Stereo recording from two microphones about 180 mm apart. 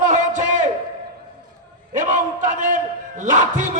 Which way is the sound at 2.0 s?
45° right (ahead or behind).